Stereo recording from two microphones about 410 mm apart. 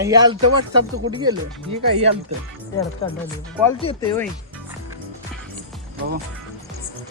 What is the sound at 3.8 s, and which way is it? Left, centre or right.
Speech, centre.